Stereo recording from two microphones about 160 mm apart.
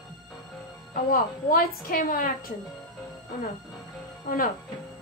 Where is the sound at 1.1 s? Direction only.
65° left (ahead or behind).